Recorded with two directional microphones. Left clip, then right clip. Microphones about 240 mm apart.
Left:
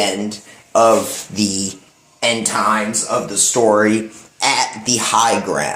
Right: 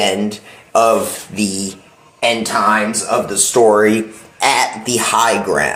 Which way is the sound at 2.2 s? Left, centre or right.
Left.